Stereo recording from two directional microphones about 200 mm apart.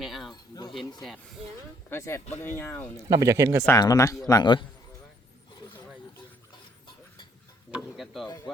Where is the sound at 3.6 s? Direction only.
20° left (ahead or behind).